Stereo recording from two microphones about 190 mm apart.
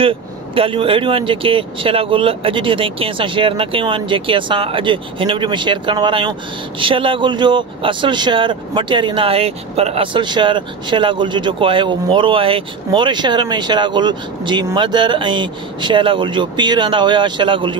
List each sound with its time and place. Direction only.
0.6 s speech: 30° right (ahead or behind)